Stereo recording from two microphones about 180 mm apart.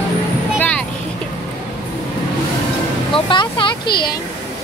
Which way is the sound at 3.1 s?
30° left (ahead or behind).